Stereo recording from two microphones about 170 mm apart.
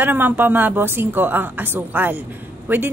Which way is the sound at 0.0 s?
10° right (ahead or behind).